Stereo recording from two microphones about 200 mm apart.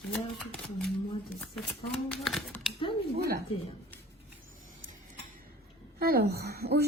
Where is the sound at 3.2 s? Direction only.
50° right (ahead or behind).